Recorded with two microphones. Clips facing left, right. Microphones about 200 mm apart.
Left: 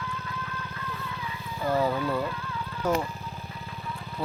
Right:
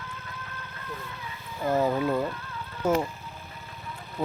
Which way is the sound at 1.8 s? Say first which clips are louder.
Right 2 dB; 20° right (ahead or behind).